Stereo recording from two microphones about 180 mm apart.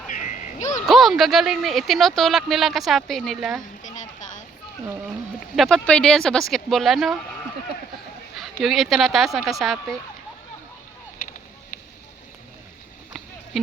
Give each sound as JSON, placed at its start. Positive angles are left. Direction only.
{"t": 0.1, "sound": "music", "side_deg": 45}
{"t": 0.9, "sound": "speech", "side_deg": 0}
{"t": 3.8, "sound": "a sound", "side_deg": 45}
{"t": 5.5, "sound": "speech", "side_deg": 5}
{"t": 8.4, "sound": "speech", "side_deg": 0}